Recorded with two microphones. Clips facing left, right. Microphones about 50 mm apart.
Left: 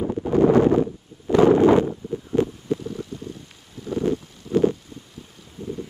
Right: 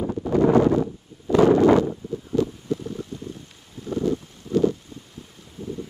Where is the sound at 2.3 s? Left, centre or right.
Left.